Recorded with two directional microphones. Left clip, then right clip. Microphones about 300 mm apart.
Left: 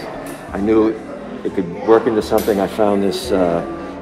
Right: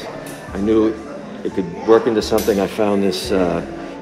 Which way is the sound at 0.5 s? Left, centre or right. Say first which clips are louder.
Left 1 dB; centre.